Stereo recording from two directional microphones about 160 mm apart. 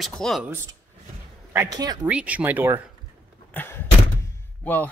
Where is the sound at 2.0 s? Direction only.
10° right (ahead or behind).